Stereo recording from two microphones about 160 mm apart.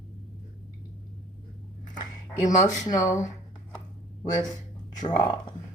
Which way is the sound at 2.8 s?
20° left (ahead or behind).